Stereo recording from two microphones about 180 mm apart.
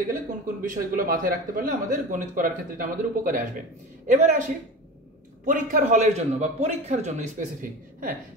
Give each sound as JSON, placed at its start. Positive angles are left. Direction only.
{"t": 0.0, "sound": "a man's voice", "side_deg": -50}